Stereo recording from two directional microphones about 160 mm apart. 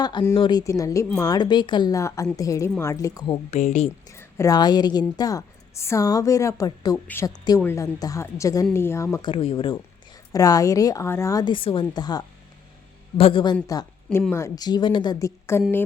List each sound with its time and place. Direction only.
0.0 s a woman's voice: 30° left (ahead or behind)
3.5 s speech: 45° left (ahead or behind)
4.1 s a woman's voice: 15° left (ahead or behind)
9.1 s speech: 30° left (ahead or behind)
10.3 s a woman's voice: 20° left (ahead or behind)